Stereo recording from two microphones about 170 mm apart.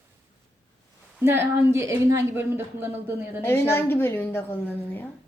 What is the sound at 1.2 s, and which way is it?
A woman's voice, 15° right (ahead or behind).